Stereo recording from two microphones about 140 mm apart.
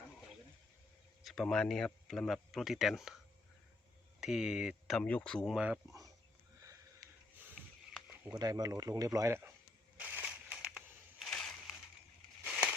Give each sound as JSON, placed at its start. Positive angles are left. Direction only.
{"t": 1.2, "sound": "speech", "side_deg": 0}
{"t": 4.2, "sound": "speech", "side_deg": -5}
{"t": 4.9, "sound": "speech", "side_deg": 10}
{"t": 5.5, "sound": "speech", "side_deg": -5}
{"t": 8.2, "sound": "speech", "side_deg": -25}
{"t": 10.0, "sound": "crushing", "side_deg": -10}
{"t": 12.5, "sound": "a sound", "side_deg": -10}